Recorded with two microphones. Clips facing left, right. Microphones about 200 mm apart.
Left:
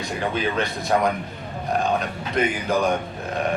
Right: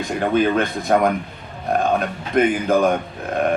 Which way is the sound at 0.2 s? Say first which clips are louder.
Right 7 dB; 50° right (ahead or behind).